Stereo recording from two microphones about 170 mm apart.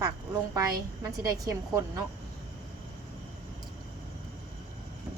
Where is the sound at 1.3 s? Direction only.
20° right (ahead or behind).